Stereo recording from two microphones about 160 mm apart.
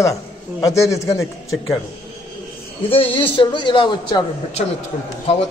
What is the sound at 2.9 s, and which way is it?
A man's voice, 35° left (ahead or behind).